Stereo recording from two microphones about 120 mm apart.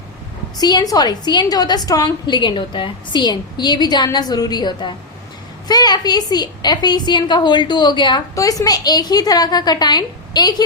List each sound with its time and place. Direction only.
0.6 s a woman's voice: 35° left (ahead or behind)